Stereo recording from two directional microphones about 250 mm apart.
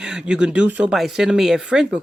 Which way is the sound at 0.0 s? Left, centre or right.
Centre.